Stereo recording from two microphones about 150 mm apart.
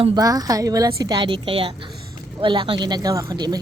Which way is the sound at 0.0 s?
25° right (ahead or behind).